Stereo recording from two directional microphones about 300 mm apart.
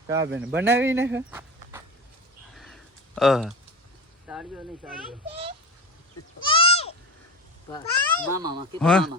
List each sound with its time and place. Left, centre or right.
0.2 s speech: right
0.4 s speech: centre
1.3 s walk: centre
2.6 s a sound: centre
4.3 s a child's voice: centre
6.4 s goat: centre
7.7 s a child's voice: centre
8.3 s speech: centre
8.8 s a child's voice: centre